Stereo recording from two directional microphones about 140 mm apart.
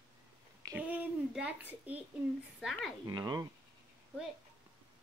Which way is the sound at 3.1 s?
30° right (ahead or behind).